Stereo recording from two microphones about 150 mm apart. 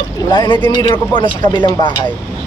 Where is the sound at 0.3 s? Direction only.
30° left (ahead or behind).